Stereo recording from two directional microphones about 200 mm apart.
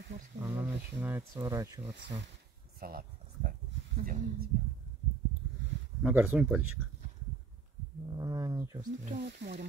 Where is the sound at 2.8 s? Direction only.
50° right (ahead or behind).